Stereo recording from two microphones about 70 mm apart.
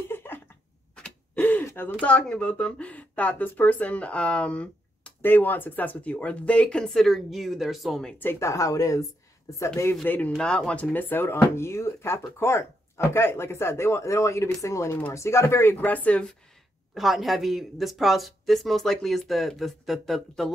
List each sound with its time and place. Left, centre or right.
0.1 s a sound: left
0.9 s gasp: centre
1.4 s gasp: left
2.0 s speech: centre
5.2 s speech: left
6.9 s speech: centre
8.4 s speech: left
10.0 s speech: left
10.3 s speech: centre
16.9 s speech: centre